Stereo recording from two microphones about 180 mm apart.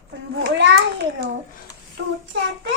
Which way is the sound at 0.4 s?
80° right.